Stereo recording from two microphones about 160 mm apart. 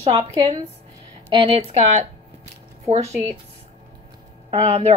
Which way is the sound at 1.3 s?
35° right (ahead or behind).